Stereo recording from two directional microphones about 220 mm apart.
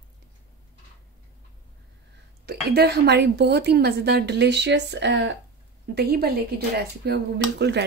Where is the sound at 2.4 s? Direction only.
45° right (ahead or behind).